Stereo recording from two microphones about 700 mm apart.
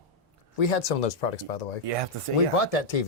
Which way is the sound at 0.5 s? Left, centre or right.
Left.